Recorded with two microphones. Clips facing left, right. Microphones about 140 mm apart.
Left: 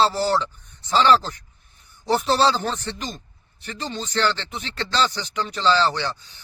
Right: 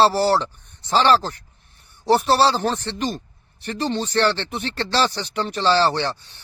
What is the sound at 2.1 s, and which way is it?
Speech, 65° right (ahead or behind).